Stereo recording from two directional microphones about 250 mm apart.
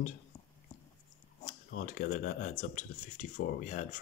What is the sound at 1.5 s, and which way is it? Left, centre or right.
Speech, left.